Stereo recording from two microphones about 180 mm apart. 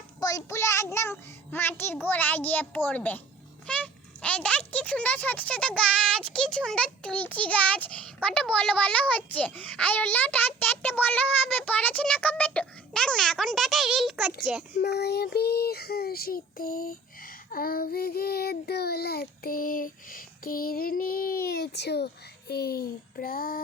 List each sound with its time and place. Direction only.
0.2 s a child's voice: 20° left (ahead or behind); by 14.3 s centre (ahead or behind)
14.7 s speech: 60° left (ahead or behind)